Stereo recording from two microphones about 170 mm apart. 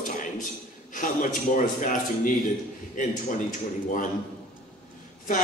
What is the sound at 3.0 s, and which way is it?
Speech, 50° left (ahead or behind).